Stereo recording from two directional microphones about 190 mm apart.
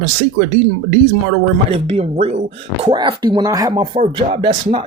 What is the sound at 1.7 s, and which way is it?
Speech, 35° right (ahead or behind).